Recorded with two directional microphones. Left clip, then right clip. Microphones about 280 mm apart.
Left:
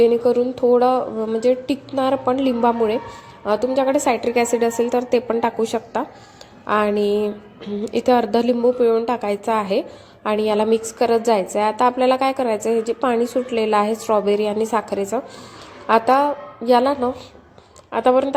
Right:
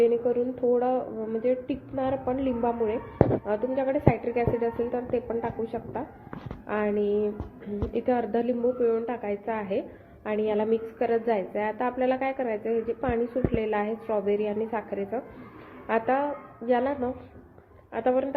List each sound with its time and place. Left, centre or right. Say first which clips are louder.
0.0 s a woman's voice: left 8 dB; left